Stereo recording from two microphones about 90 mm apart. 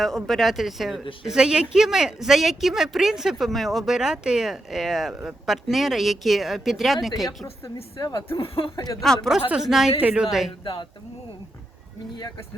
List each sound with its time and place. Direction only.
0.3 s speech: centre (ahead or behind)
8.4 s speech: 90° left
8.7 s speech: 40° left (ahead or behind)
9.0 s speech: 5° left (ahead or behind)
10.0 s a woman's voice: 15° right (ahead or behind)
10.6 s speech: 65° left (ahead or behind)